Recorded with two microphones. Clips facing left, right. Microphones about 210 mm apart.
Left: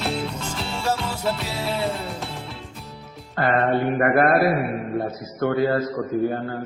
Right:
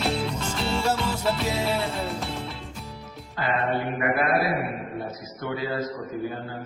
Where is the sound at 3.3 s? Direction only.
55° left (ahead or behind).